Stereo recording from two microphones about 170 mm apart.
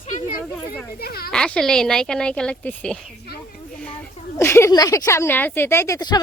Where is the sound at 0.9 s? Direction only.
65° left (ahead or behind).